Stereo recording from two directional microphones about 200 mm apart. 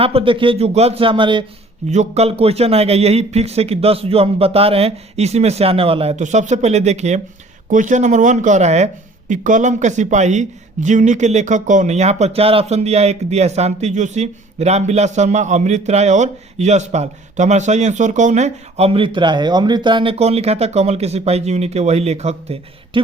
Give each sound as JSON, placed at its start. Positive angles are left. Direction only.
{"t": 0.0, "sound": "a man's voice", "side_deg": -25}